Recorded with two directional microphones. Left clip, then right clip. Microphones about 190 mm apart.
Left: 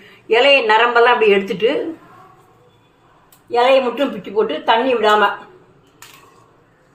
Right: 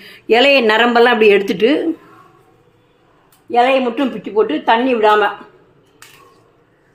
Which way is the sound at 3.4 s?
35° right (ahead or behind).